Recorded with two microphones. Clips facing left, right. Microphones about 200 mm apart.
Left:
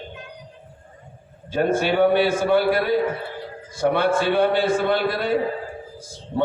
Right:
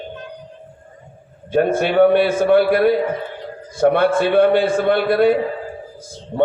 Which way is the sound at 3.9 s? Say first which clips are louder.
Right 3 dB; 55° right (ahead or behind).